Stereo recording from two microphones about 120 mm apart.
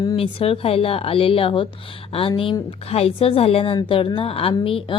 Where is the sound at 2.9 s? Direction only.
55° left (ahead or behind).